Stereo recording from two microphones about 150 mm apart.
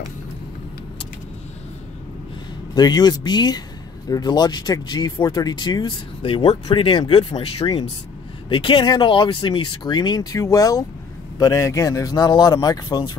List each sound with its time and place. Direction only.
2.7 s speech: 25° left (ahead or behind)